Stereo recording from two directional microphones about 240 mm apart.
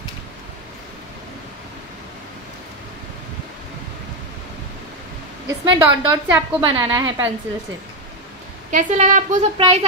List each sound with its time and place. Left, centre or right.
5.7 s a woman's voice: centre
8.7 s speech: right